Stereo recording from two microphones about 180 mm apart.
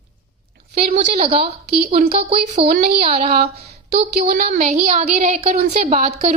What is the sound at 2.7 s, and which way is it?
Speech, 55° right (ahead or behind).